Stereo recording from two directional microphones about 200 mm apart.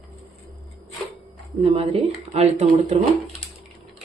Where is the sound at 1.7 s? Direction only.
30° right (ahead or behind).